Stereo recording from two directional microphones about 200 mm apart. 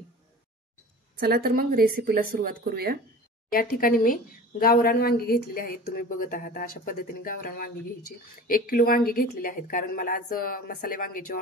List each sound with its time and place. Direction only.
1.2 s speech: 50° right (ahead or behind)
3.4 s a woman's voice: 45° left (ahead or behind)